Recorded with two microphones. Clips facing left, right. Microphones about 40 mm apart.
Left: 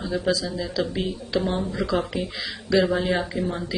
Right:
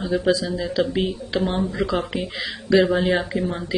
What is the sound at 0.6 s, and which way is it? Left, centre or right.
Speech, right.